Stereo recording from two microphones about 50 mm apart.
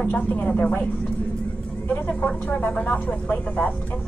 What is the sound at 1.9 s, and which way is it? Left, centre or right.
Speech, left.